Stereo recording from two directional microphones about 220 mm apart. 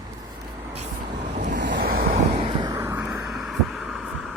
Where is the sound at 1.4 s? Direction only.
50° right (ahead or behind).